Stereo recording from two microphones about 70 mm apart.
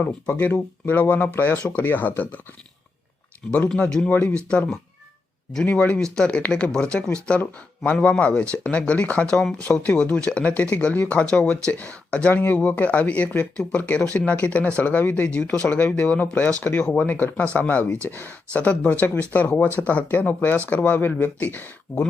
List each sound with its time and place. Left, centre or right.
0.0 s speech: left
3.7 s speech: centre
12.3 s speech: left
12.5 s speech: centre